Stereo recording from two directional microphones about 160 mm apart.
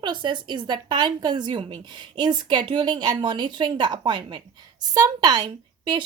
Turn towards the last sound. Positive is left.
turn(degrees=-25)  # may be behind; listen again after turning